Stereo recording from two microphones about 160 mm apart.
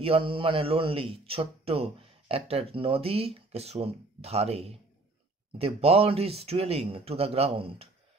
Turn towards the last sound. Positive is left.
turn(degrees=-35)  # may be behind; listen again after turning